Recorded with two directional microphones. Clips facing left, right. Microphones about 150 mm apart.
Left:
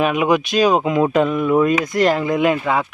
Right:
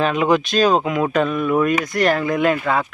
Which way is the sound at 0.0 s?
15° left (ahead or behind).